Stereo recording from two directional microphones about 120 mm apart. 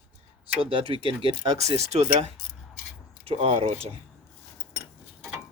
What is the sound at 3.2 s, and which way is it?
Speech, 55° right (ahead or behind).